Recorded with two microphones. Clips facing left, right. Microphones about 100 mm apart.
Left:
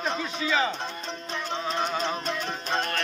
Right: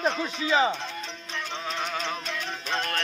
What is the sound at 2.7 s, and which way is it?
Music, 5° left (ahead or behind).